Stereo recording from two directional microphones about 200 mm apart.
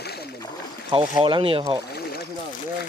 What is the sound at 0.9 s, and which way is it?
Speech, 25° right (ahead or behind).